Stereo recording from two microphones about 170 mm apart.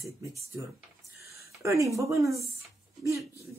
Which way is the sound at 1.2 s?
15° right (ahead or behind).